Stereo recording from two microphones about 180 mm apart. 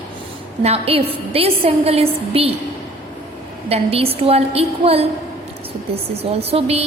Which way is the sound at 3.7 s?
35° right (ahead or behind).